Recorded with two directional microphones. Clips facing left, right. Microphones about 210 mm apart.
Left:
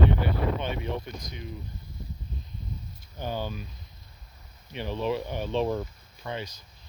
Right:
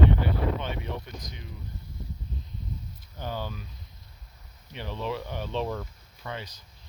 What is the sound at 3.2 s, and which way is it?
Speech, 15° left (ahead or behind).